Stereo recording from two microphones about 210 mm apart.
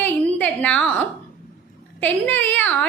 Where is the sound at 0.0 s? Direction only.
5° left (ahead or behind).